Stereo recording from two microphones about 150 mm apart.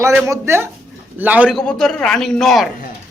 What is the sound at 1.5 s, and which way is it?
A man's voice, 5° left (ahead or behind).